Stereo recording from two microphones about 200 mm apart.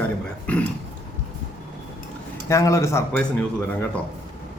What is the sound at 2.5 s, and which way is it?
Speech, 15° left (ahead or behind).